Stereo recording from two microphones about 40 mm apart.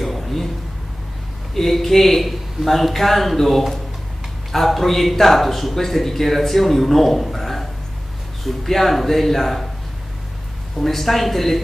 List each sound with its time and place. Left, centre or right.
0.0 s a sound: centre
1.5 s speech: centre
10.8 s speech: centre